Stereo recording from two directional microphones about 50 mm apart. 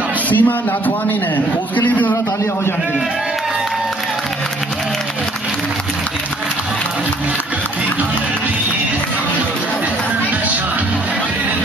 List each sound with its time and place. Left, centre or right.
0.3 s a man's voice: left